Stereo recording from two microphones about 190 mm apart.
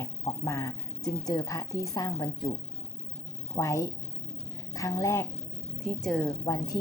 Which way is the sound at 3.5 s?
15° left (ahead or behind).